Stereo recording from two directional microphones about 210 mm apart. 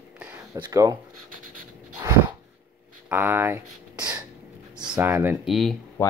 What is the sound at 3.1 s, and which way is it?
Speech, 10° right (ahead or behind).